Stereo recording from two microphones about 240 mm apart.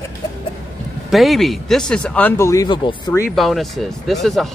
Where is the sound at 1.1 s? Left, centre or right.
Centre.